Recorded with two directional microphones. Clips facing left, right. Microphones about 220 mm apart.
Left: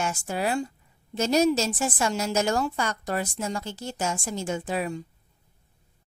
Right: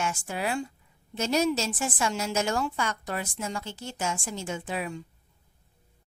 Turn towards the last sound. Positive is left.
turn(degrees=40)  # may be behind; listen again after turning